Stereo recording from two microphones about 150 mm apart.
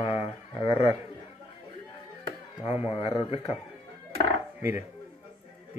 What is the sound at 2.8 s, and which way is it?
Speech, 40° left (ahead or behind).